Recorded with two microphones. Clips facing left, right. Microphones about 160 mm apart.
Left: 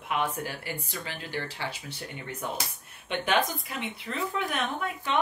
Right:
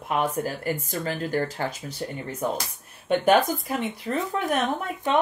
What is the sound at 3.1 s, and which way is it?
Speech, 45° right (ahead or behind).